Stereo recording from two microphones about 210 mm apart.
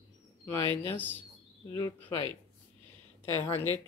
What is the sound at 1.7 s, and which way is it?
Speech, 15° left (ahead or behind).